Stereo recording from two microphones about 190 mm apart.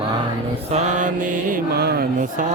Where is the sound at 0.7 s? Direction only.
35° right (ahead or behind).